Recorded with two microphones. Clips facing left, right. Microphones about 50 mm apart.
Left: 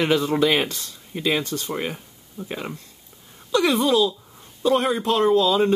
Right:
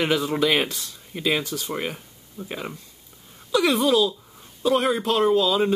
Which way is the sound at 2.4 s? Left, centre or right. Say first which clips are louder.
Left 1 dB; centre.